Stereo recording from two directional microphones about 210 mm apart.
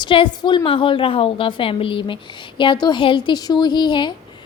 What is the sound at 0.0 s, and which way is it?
A woman's voice, 25° left (ahead or behind).